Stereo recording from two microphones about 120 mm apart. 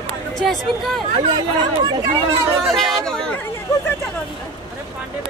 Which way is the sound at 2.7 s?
5° left (ahead or behind).